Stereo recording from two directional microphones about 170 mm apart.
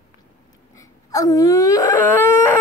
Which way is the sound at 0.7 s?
20° left (ahead or behind).